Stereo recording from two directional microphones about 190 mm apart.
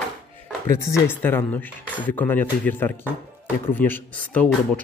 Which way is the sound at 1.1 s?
10° left (ahead or behind).